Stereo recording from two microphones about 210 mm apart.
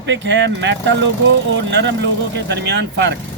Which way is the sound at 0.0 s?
60° right (ahead or behind).